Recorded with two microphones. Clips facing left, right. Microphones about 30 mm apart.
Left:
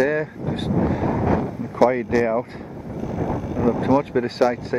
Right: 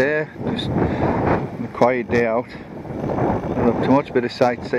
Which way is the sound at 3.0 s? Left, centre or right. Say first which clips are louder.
Right 5 dB; right.